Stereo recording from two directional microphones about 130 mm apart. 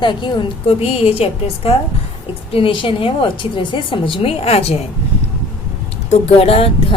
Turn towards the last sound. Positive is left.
turn(degrees=50)  # may be behind; listen again after turning